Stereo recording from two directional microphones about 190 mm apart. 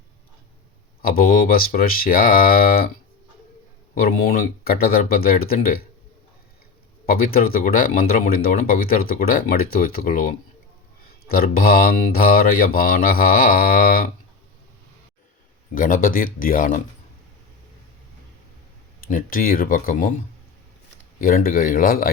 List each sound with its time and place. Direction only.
1.0 s speech: 50° left (ahead or behind)
3.9 s speech: 50° left (ahead or behind)
7.0 s speech: 50° left (ahead or behind)
15.7 s speech: 45° left (ahead or behind)
19.1 s speech: 50° left (ahead or behind)
21.2 s speech: 50° left (ahead or behind)